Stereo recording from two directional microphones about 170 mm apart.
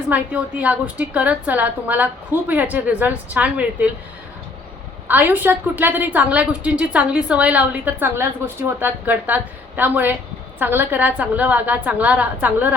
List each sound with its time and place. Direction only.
0.1 s a woman's voice: 10° right (ahead or behind)
5.0 s a woman's voice: 10° right (ahead or behind)